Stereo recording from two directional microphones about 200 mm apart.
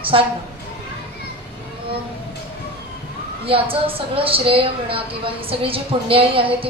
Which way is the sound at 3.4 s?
25° right (ahead or behind).